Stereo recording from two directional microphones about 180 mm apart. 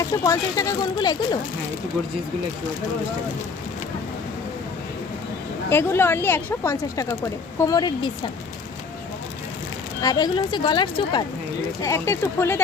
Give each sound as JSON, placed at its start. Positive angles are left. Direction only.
{"t": 0.0, "sound": "speech", "side_deg": 20}
{"t": 5.6, "sound": "speech", "side_deg": 15}
{"t": 10.0, "sound": "speech", "side_deg": 20}